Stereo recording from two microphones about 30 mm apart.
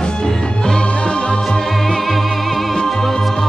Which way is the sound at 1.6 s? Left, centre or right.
Centre.